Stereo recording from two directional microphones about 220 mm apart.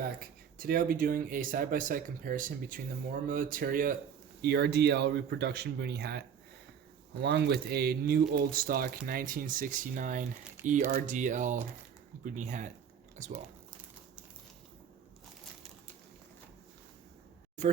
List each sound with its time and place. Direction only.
0.0 s speech: 45° right (ahead or behind)
4.4 s speech: 50° right (ahead or behind)
10.6 s speech: 10° right (ahead or behind)
10.9 s speech: 35° right (ahead or behind)